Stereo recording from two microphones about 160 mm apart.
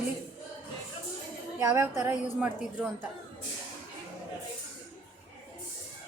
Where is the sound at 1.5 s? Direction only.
15° right (ahead or behind).